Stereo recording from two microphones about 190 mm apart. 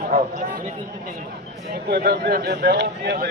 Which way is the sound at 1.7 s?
55° right (ahead or behind).